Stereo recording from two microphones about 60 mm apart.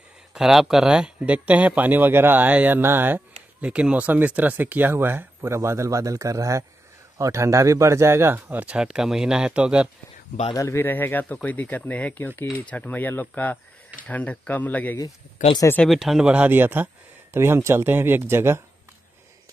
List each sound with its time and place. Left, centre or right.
0.3 s speech: centre; by 3.2 s right
3.6 s speech: centre
4.9 s speech: right
5.5 s speech: right
8.5 s speech: right
8.7 s speech: centre
10.5 s speech: left
10.8 s speech: left
15.9 s speech: centre
16.3 s speech: right
17.3 s speech: right